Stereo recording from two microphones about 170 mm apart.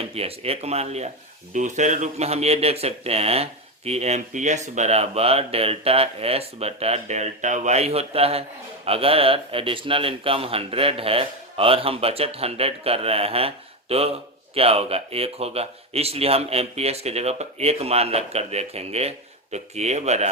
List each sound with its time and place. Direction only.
0.0 s speech: 35° right (ahead or behind)